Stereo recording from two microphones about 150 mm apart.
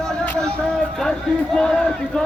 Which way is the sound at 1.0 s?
Centre (ahead or behind).